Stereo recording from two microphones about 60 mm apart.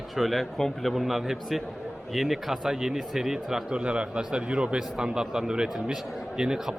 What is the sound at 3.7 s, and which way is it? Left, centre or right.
A man's voice, centre.